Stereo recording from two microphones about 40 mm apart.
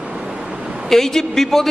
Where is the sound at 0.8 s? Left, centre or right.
Centre.